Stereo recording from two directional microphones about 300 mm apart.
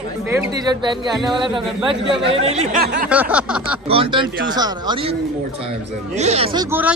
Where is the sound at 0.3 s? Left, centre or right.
Centre; by 3.1 s right.